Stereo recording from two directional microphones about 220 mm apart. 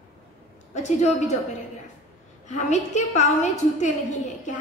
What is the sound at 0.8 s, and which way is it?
Speech, 30° left (ahead or behind).